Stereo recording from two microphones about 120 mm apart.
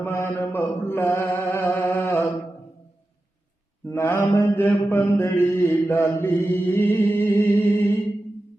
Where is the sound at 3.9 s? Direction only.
25° left (ahead or behind).